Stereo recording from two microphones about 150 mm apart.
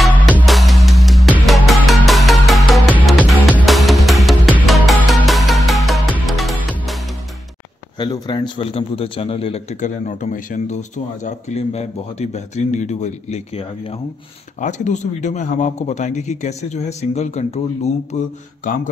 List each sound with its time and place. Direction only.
0.1 s music: 10° left (ahead or behind)
0.5 s music: centre (ahead or behind)
8.0 s a man's voice: 30° left (ahead or behind)
14.6 s a man's voice: 55° left (ahead or behind)